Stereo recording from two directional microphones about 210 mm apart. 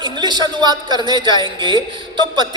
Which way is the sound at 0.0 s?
20° right (ahead or behind).